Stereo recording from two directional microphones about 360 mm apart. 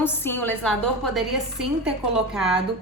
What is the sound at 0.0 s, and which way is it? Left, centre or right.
A woman's voice, centre.